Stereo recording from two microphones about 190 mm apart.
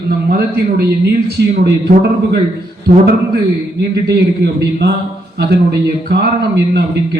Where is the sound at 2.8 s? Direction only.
55° right (ahead or behind).